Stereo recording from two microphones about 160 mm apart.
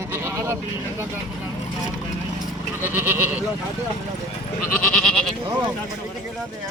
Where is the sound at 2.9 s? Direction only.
15° right (ahead or behind).